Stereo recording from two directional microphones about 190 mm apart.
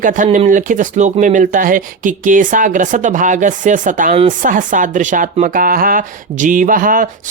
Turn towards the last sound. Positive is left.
turn(degrees=-45)  # may be behind; listen again after turning